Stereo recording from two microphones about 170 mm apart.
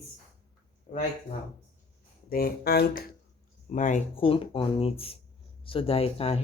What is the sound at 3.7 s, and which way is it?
Speech, 50° left (ahead or behind).